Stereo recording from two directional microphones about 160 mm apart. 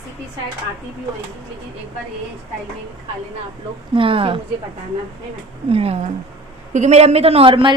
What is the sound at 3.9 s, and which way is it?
Speech, 35° right (ahead or behind).